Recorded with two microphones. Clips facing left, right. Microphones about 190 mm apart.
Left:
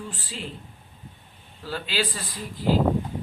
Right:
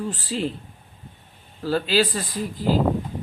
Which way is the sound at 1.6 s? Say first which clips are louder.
Right 9 dB; 40° right (ahead or behind).